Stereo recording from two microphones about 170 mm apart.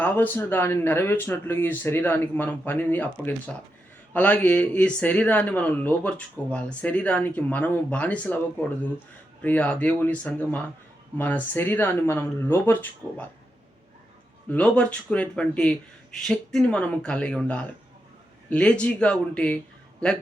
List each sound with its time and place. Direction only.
0.0 s speech: 10° left (ahead or behind)
9.4 s speech: 10° left (ahead or behind)
14.5 s speech: 5° left (ahead or behind)